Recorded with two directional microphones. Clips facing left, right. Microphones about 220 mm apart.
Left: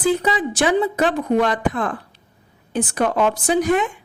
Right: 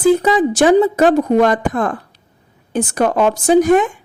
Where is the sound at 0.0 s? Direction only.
45° right (ahead or behind).